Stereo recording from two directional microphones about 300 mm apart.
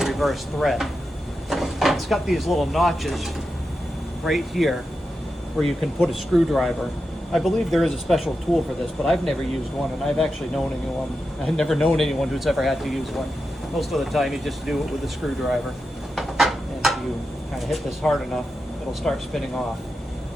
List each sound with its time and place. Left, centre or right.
0.0 s speech: centre
4.3 s speech: centre
16.1 s a sound: centre
17.7 s speech: centre